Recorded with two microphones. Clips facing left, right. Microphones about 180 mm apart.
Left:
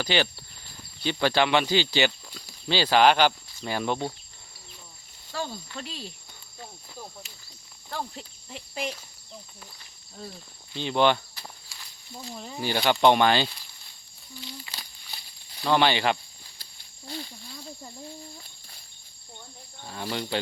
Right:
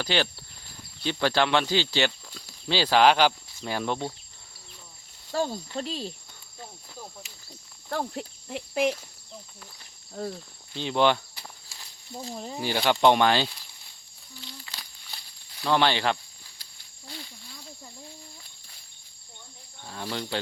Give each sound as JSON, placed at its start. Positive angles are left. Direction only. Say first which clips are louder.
{"t": 0.0, "sound": "speech", "louder": "left 1 dB", "side_deg": 0}
{"t": 5.3, "sound": "speech", "louder": "right 6 dB", "side_deg": -40}
{"t": 7.9, "sound": "speech", "louder": "right 5 dB", "side_deg": -55}
{"t": 10.2, "sound": "speech", "louder": "right 8 dB", "side_deg": -70}
{"t": 10.8, "sound": "speech", "louder": "even", "side_deg": 0}
{"t": 11.8, "sound": "snake", "louder": "right 4 dB", "side_deg": -35}
{"t": 12.5, "sound": "speech", "louder": "left 1 dB", "side_deg": -5}
{"t": 15.6, "sound": "speech", "louder": "left 1 dB", "side_deg": 5}
{"t": 17.1, "sound": "speech", "louder": "left 5 dB", "side_deg": 35}
{"t": 19.8, "sound": "speech", "louder": "left 1 dB", "side_deg": 5}